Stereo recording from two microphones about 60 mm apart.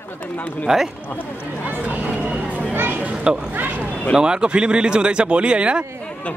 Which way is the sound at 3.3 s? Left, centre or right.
Centre.